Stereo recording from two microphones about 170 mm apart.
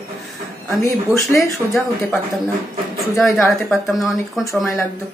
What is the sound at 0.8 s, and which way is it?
Speech, 20° left (ahead or behind).